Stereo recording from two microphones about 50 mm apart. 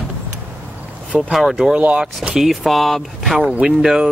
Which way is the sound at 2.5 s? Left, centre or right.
Centre.